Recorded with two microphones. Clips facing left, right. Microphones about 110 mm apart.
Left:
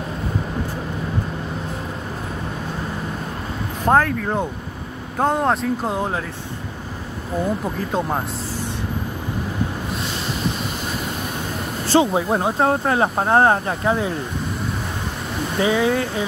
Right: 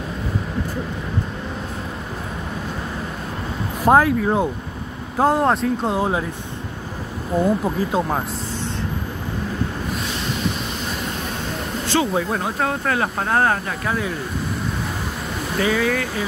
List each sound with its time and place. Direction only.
3.8 s speech: 10° right (ahead or behind)
7.4 s speech: 10° right (ahead or behind)
12.0 s speech: 20° left (ahead or behind)
15.6 s speech: 20° left (ahead or behind)